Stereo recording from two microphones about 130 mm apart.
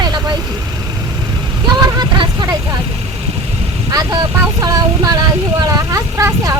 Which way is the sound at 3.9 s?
30° right (ahead or behind).